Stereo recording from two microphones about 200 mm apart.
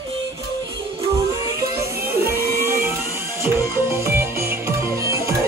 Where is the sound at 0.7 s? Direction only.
15° right (ahead or behind).